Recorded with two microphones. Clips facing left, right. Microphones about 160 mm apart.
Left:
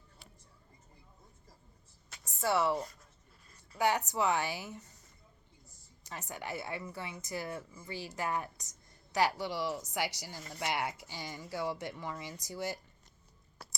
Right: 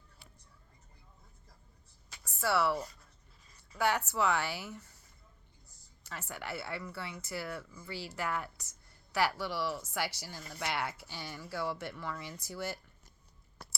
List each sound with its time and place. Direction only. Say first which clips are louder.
2.2 s a sound: even; 20° left (ahead or behind)
3.8 s speech: left 1 dB; 15° left (ahead or behind)
6.0 s speech: left 1 dB; 15° left (ahead or behind)